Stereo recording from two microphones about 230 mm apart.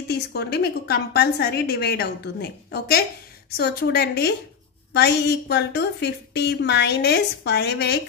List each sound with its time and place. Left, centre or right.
0.1 s a woman's voice: left